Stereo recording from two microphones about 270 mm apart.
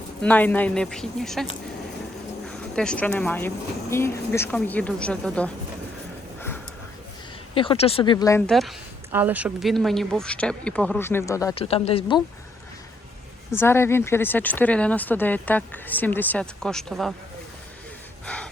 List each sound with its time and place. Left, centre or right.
0.2 s speech: centre
2.5 s speech: centre
7.5 s speech: centre
13.5 s speech: centre